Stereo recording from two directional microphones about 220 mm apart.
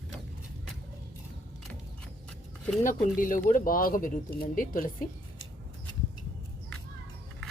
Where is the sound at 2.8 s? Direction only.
35° left (ahead or behind).